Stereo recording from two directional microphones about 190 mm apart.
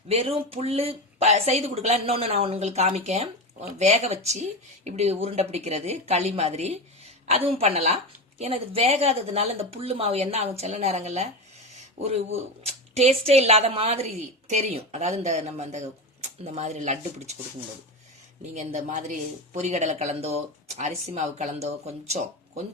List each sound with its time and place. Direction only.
0.1 s speech: 30° right (ahead or behind)
18.5 s speech: 40° right (ahead or behind)